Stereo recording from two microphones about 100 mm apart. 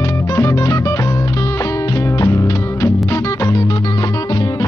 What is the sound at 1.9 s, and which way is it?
Music, 30° left (ahead or behind).